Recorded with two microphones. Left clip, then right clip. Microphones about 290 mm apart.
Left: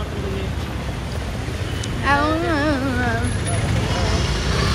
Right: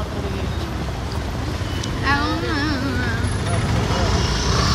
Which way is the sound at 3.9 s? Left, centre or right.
Centre.